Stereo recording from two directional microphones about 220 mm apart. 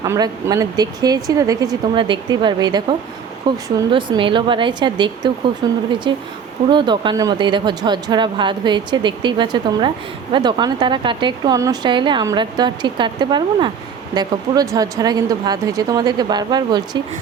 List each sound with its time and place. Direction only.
0.0 s a woman's voice: 15° right (ahead or behind)